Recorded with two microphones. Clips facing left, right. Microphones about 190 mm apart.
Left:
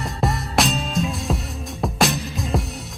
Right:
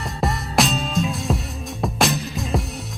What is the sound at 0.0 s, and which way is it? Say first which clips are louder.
Music: left 1 dB; centre (ahead or behind).